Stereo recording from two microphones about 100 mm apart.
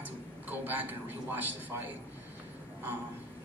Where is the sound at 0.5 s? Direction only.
20° right (ahead or behind).